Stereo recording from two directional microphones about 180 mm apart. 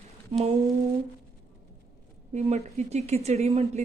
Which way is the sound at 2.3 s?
35° right (ahead or behind).